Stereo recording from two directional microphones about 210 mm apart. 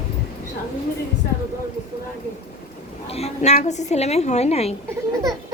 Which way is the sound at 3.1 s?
30° left (ahead or behind).